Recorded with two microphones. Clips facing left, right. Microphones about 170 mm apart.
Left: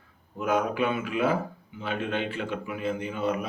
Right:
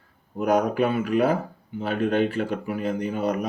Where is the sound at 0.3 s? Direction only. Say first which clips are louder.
Right 5 dB; 40° right (ahead or behind).